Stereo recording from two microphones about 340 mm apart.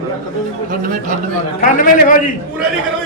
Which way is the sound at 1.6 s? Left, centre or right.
Left.